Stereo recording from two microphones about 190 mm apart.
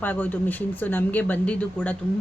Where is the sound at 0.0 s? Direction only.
10° left (ahead or behind).